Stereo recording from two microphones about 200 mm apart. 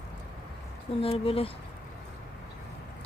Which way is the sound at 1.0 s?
30° left (ahead or behind).